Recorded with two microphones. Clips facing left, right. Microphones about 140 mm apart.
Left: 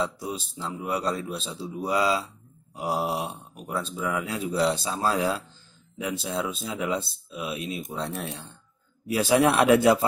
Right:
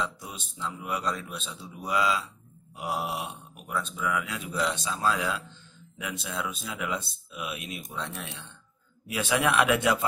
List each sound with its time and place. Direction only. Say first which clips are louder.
0.0 s speech: left 5 dB; 35° left (ahead or behind)